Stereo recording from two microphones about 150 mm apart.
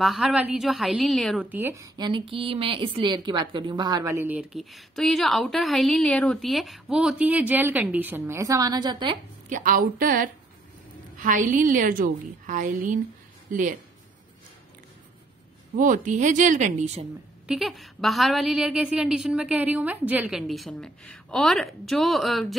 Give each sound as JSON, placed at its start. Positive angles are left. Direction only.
{"t": 0.0, "sound": "a woman's voice", "side_deg": -5}
{"t": 1.4, "sound": "a woman's voice", "side_deg": -15}
{"t": 2.0, "sound": "a woman's voice", "side_deg": -30}
{"t": 4.4, "sound": "a woman's voice", "side_deg": 0}
{"t": 9.5, "sound": "a woman's voice", "side_deg": -60}
{"t": 11.1, "sound": "a woman's voice", "side_deg": -60}
{"t": 15.7, "sound": "a woman's voice", "side_deg": -60}
{"t": 17.5, "sound": "a woman's voice", "side_deg": 0}